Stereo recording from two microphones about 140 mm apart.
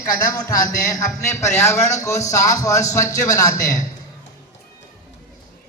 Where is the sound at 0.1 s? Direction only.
25° left (ahead or behind).